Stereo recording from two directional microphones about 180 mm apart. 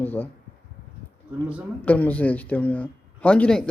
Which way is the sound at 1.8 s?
10° left (ahead or behind).